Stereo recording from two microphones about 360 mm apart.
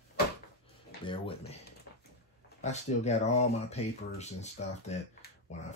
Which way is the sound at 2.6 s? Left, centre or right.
Centre.